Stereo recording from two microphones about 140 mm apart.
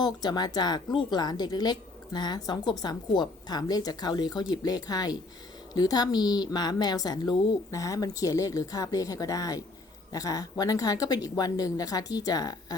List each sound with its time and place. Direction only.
0.0 s speech: 30° left (ahead or behind)